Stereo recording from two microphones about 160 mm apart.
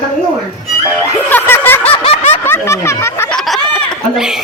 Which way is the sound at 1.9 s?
40° left (ahead or behind).